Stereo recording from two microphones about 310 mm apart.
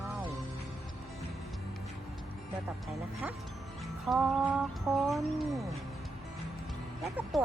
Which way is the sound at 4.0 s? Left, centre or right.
Centre.